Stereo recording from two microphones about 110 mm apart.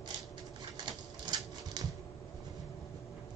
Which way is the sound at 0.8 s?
40° right (ahead or behind).